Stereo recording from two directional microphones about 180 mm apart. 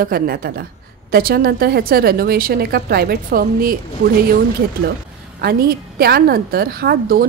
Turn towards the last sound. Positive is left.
turn(degrees=-55)  # may be behind; listen again after turning